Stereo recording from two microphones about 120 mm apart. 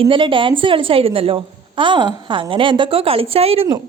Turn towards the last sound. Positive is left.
turn(degrees=-55)  # may be behind; listen again after turning